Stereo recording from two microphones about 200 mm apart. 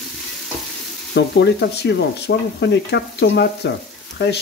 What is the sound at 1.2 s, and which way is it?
Speech, 55° left (ahead or behind).